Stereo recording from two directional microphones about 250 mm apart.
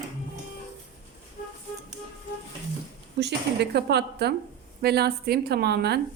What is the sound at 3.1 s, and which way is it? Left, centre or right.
A woman's voice, right.